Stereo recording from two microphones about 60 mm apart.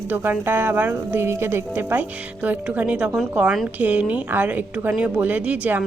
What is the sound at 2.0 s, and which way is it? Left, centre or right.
A woman's voice, right.